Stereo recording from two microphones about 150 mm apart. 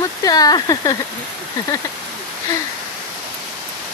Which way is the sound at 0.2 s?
25° left (ahead or behind).